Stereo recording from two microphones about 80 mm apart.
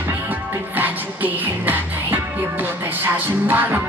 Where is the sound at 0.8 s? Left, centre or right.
Right.